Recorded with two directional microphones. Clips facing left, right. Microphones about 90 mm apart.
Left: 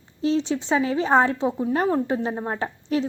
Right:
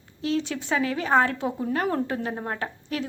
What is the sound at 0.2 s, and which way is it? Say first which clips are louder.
A woman's voice: left 4 dB; 25° left (ahead or behind).